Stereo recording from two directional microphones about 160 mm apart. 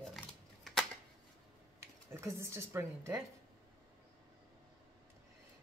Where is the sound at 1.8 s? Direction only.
15° right (ahead or behind).